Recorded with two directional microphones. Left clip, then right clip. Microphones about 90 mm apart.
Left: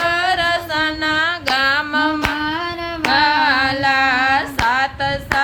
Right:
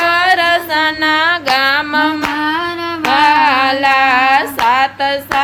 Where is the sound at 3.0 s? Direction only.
25° right (ahead or behind).